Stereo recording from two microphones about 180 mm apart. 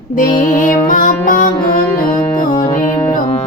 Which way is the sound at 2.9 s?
25° left (ahead or behind).